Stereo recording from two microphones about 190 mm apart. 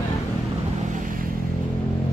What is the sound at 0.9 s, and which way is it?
Vehicle, 45° right (ahead or behind).